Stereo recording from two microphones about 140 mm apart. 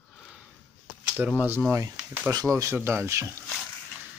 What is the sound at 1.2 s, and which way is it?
Speech, 5° right (ahead or behind).